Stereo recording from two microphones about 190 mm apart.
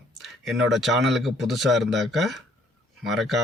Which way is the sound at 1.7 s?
70° right (ahead or behind).